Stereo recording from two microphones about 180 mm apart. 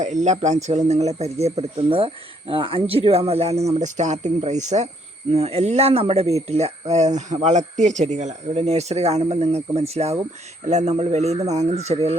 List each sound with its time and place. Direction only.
0.0 s speech: 40° right (ahead or behind)